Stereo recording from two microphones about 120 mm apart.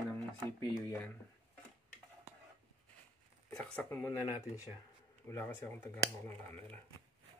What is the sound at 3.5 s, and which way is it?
Speech, 10° left (ahead or behind).